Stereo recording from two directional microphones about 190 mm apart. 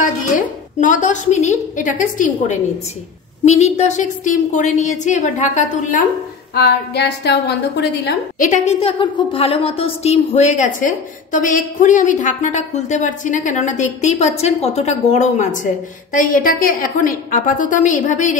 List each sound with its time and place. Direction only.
0.7 s a woman's voice: 40° left (ahead or behind)
6.5 s a woman's voice: 60° left (ahead or behind)
8.4 s a woman's voice: 40° left (ahead or behind)
8.7 s a woman's voice: 30° left (ahead or behind)